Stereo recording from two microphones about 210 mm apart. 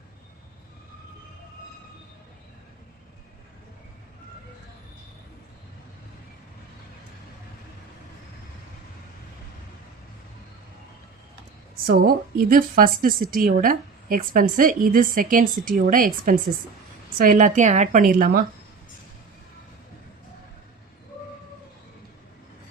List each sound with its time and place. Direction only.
11.9 s speech: 45° right (ahead or behind)